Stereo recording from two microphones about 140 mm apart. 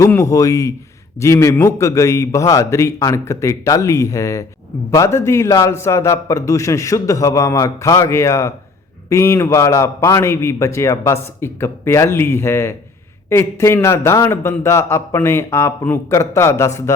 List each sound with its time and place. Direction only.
0.2 s a man's voice: 25° left (ahead or behind)